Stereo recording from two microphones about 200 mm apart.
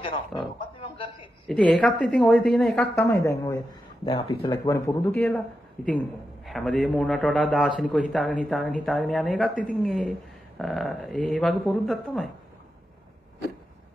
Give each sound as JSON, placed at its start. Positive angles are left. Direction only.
{"t": 0.0, "sound": "a sound", "side_deg": 25}
{"t": 1.5, "sound": "a man's voice", "side_deg": 5}
{"t": 3.1, "sound": "a man's voice", "side_deg": 15}